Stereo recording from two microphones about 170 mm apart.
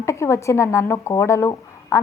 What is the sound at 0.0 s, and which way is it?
Speech, 15° left (ahead or behind).